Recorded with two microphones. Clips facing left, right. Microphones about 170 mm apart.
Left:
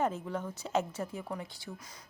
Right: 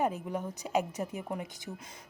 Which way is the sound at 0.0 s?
15° right (ahead or behind).